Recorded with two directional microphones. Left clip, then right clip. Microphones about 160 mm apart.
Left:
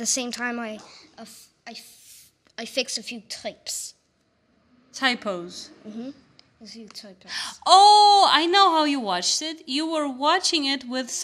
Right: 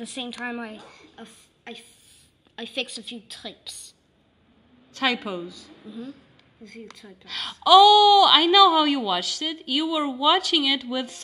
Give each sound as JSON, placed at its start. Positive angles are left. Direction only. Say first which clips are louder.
{"t": 0.1, "sound": "a woman's voice", "louder": "left 5 dB", "side_deg": 35}
{"t": 4.9, "sound": "a woman's voice", "louder": "left 1 dB", "side_deg": 5}
{"t": 7.0, "sound": "a woman's voice", "louder": "left 5 dB", "side_deg": 45}
{"t": 7.2, "sound": "a woman's voice", "louder": "right 1 dB", "side_deg": 0}